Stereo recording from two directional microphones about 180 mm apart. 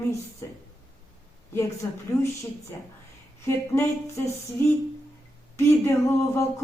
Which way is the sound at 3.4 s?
15° left (ahead or behind).